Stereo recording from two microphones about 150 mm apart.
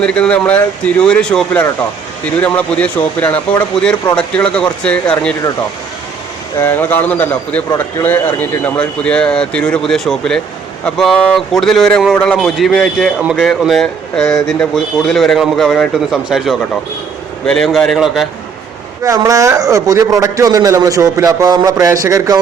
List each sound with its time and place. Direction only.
0.0 s a man's voice: 5° left (ahead or behind)
6.6 s a man's voice: 15° left (ahead or behind); by 18.3 s centre (ahead or behind)
19.0 s a man's voice: 25° right (ahead or behind)